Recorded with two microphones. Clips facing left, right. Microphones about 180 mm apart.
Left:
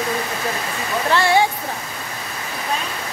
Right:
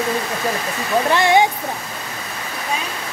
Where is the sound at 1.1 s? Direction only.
15° right (ahead or behind).